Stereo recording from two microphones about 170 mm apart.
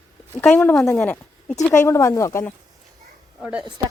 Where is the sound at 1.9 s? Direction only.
15° left (ahead or behind).